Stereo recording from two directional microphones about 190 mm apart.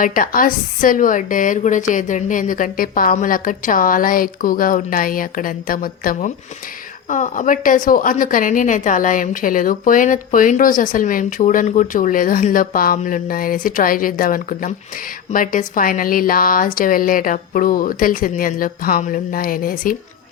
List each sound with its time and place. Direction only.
0.0 s a woman's voice: 45° left (ahead or behind)